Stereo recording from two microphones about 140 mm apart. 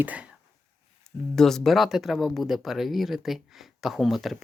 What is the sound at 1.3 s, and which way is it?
Speech, 5° left (ahead or behind).